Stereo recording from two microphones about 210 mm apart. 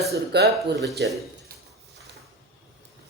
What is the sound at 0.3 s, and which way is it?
Speech, 55° right (ahead or behind).